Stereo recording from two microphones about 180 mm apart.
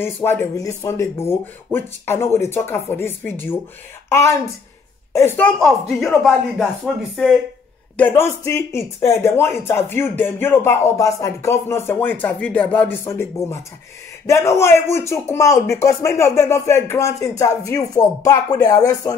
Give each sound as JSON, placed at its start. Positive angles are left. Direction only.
{"t": 0.0, "sound": "speech", "side_deg": 10}
{"t": 5.6, "sound": "speech", "side_deg": 0}
{"t": 8.0, "sound": "speech", "side_deg": 15}